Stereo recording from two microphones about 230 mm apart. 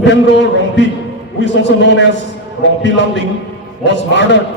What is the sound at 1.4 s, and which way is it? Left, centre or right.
Speech, left.